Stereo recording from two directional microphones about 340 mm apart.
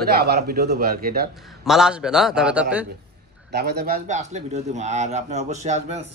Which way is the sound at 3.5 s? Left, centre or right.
Right.